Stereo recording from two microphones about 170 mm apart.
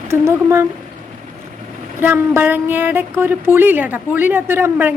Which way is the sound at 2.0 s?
10° right (ahead or behind).